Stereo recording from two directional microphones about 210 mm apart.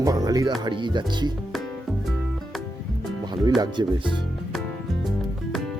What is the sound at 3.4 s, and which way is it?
Speech, 20° right (ahead or behind).